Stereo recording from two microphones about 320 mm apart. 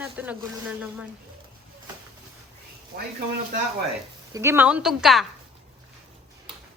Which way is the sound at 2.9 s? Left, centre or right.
Right.